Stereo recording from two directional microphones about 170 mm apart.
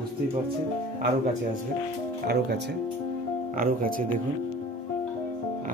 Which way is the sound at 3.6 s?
55° right (ahead or behind).